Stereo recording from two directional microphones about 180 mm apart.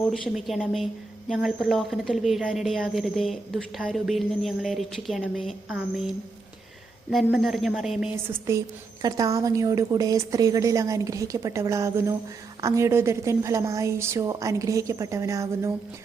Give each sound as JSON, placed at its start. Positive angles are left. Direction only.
{"t": 0.1, "sound": "a woman's voice", "side_deg": 0}